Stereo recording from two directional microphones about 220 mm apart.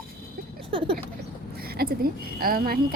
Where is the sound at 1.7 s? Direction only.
45° right (ahead or behind).